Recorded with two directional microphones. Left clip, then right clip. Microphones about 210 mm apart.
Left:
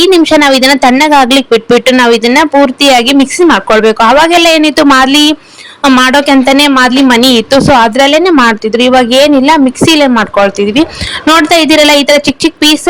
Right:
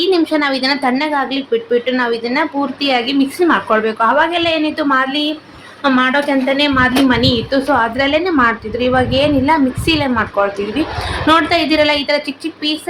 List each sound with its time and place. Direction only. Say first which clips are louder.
0.0 s speech: left 10 dB; 50° left (ahead or behind)